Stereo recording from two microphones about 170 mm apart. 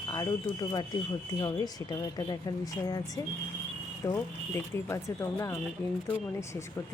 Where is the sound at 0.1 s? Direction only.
20° left (ahead or behind).